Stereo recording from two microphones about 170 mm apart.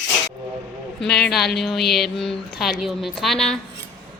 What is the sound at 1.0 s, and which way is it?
Speech, 5° left (ahead or behind).